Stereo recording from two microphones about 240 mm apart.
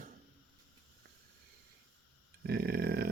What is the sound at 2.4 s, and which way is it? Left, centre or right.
Speech, right.